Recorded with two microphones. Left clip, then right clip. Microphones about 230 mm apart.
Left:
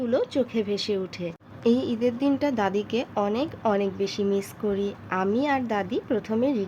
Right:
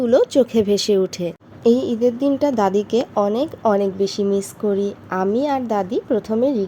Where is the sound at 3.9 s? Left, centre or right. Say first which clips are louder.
Right 6 dB; centre.